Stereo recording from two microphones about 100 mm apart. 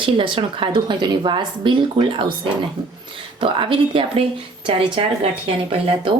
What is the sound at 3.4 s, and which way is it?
Speech, 60° right (ahead or behind).